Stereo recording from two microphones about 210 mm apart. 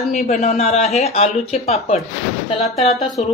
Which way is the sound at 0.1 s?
30° left (ahead or behind).